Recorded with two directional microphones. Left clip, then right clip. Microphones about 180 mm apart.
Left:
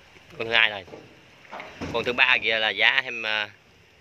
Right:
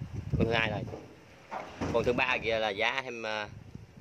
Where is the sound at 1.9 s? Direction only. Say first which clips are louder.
Left 7 dB; 5° right (ahead or behind).